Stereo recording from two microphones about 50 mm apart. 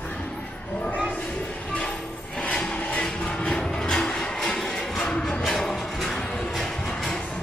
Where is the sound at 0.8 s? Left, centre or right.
Left.